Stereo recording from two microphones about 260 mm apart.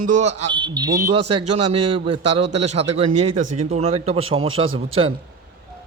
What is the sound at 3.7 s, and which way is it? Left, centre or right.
Speech, right.